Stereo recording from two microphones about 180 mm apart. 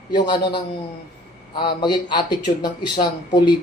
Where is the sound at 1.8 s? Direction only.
25° left (ahead or behind).